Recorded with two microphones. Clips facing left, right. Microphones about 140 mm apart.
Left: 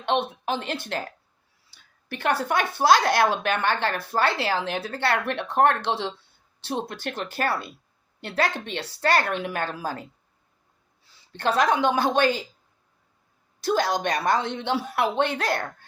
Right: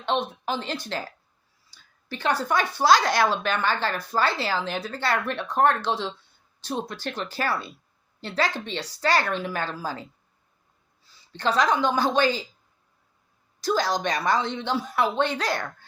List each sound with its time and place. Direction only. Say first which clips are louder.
0.0 s speech: left 1 dB; 60° left (ahead or behind)
1.7 s a sound: even; 60° left (ahead or behind)
2.4 s a woman's voice: even; 60° left (ahead or behind)
11.0 s speech: left 1 dB; 60° left (ahead or behind)
13.6 s speech: left 1 dB; 55° left (ahead or behind)